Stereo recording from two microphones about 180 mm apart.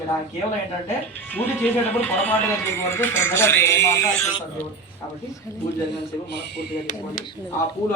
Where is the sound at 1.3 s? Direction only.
10° left (ahead or behind).